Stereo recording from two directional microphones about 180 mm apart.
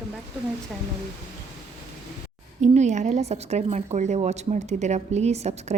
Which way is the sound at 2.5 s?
40° right (ahead or behind).